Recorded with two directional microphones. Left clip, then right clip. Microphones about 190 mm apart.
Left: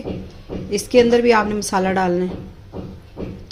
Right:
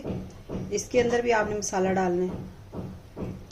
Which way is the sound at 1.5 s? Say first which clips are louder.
Left 8 dB; 75° left (ahead or behind).